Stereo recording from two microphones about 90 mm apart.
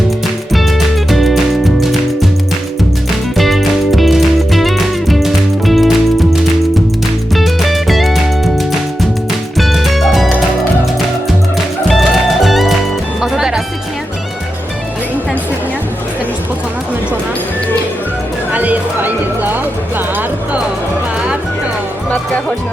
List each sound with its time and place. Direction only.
0.5 s music: centre (ahead or behind)
3.3 s music: centre (ahead or behind)
11.5 s music: centre (ahead or behind)
18.5 s music: 20° right (ahead or behind)